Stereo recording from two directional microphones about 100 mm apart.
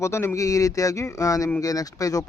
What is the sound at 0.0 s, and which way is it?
Speech, 30° left (ahead or behind).